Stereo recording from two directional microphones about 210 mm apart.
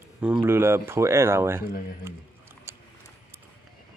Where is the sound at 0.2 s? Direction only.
10° right (ahead or behind).